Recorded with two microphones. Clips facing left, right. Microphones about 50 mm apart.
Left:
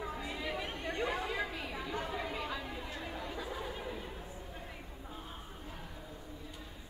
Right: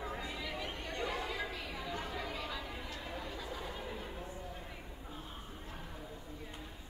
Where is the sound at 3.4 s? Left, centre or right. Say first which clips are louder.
Left 2 dB; centre.